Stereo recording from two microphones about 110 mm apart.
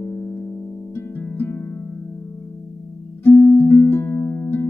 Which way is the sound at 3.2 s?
15° left (ahead or behind).